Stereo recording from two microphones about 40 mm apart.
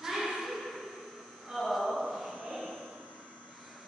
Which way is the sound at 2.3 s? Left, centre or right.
Right.